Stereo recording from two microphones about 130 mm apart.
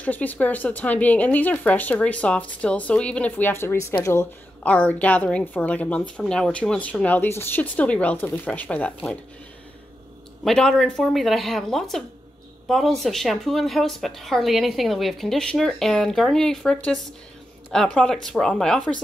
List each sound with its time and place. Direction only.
0.0 s a woman's voice: 10° left (ahead or behind)
10.4 s speech: 5° left (ahead or behind)